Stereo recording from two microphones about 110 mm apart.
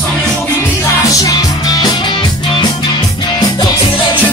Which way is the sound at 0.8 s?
30° left (ahead or behind).